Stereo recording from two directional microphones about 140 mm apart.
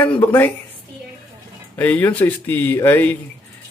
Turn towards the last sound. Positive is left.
turn(degrees=15)  # may be behind; listen again after turning